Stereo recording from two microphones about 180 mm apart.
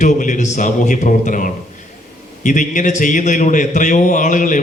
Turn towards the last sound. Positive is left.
turn(degrees=45)  # may be behind; listen again after turning